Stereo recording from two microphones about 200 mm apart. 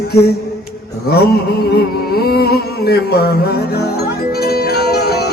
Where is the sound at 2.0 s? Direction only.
50° left (ahead or behind).